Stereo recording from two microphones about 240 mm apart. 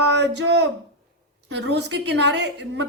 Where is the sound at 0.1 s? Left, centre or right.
Right.